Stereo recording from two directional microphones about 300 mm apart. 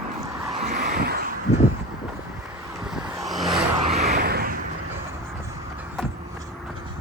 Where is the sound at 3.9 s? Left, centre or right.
Right.